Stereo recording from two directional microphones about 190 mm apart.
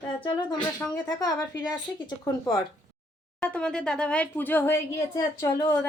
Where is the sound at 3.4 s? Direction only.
5° left (ahead or behind).